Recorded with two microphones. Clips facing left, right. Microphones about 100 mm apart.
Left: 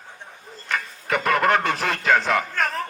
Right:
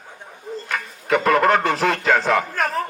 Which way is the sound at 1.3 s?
20° right (ahead or behind).